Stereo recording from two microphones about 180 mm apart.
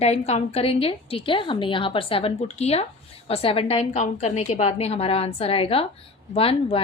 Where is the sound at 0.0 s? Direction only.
35° left (ahead or behind).